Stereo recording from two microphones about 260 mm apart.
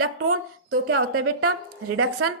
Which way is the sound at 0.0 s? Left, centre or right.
Right.